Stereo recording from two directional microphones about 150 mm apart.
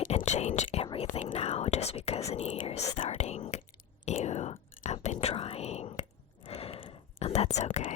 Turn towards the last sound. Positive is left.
turn(degrees=50)  # may be behind; listen again after turning